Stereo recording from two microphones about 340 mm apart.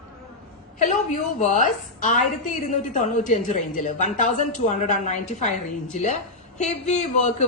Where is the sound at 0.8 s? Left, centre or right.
Left.